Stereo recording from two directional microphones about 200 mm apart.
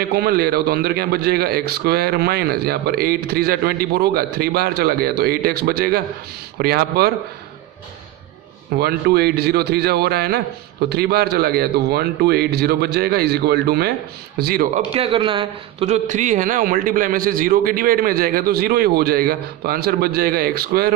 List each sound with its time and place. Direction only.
0.1 s a man's voice: 50° right (ahead or behind)
8.7 s a man's voice: 50° right (ahead or behind)
14.9 s a man's voice: 25° right (ahead or behind); by 20.9 s 50° right (ahead or behind)